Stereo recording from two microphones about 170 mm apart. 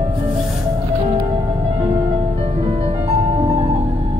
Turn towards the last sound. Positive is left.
turn(degrees=-35)  # may be behind; listen again after turning